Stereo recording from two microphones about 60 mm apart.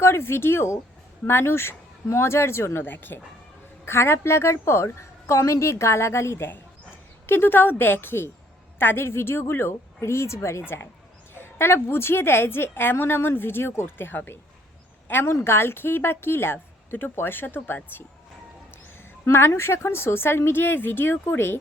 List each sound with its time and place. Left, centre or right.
0.0 s a woman's voice: left
3.8 s a woman's voice: left
11.3 s a woman's voice: left
19.2 s a woman's voice: left